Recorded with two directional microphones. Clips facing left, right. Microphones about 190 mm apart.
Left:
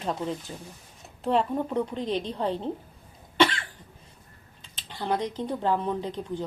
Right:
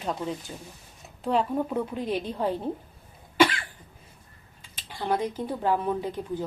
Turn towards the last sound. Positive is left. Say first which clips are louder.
# right 1 dB
turn(degrees=-10)  # may be behind; listen again after turning